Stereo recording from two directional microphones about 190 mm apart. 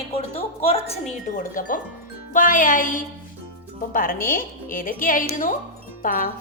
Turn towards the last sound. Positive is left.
turn(degrees=45)  # may be behind; listen again after turning